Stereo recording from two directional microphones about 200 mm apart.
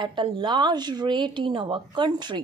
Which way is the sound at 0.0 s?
25° right (ahead or behind).